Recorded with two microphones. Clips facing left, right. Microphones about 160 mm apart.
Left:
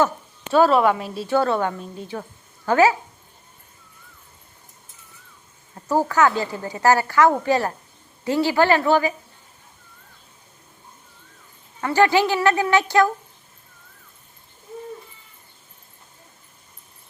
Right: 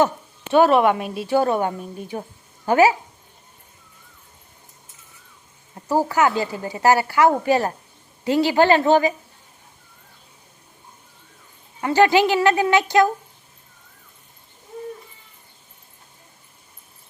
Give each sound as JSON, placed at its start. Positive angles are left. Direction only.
{"t": 0.5, "sound": "a woman's voice", "side_deg": -20}
{"t": 5.7, "sound": "a woman's voice", "side_deg": -10}
{"t": 11.8, "sound": "a woman's voice", "side_deg": -20}